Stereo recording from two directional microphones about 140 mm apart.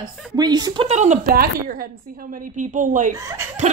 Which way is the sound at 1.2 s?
90° right.